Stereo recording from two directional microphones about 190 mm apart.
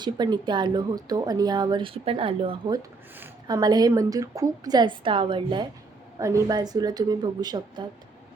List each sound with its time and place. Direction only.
0.0 s speech: 20° right (ahead or behind)